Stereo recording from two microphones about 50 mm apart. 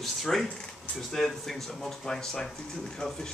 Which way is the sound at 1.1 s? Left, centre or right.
Centre.